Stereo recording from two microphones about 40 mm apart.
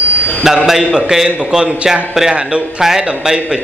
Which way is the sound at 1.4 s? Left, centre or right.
Right.